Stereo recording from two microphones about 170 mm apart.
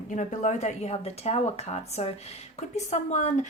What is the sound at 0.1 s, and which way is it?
A woman's voice, 45° left (ahead or behind).